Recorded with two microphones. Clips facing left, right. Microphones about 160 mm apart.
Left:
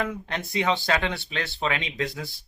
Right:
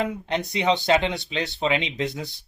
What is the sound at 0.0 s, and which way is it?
Speech, 20° right (ahead or behind).